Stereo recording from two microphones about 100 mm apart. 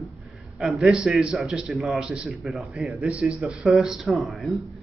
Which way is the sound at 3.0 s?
15° right (ahead or behind).